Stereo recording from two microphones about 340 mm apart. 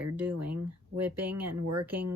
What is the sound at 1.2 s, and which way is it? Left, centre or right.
Speech, right.